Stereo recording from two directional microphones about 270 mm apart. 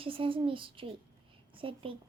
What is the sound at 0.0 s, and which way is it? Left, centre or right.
A child's voice, centre.